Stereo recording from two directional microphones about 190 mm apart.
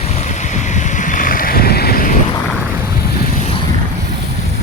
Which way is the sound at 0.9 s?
45° left (ahead or behind).